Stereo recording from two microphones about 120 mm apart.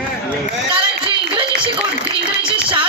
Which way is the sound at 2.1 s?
45° right (ahead or behind).